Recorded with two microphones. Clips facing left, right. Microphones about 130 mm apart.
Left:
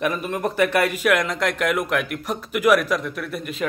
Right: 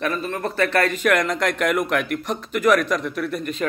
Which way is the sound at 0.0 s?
15° left (ahead or behind).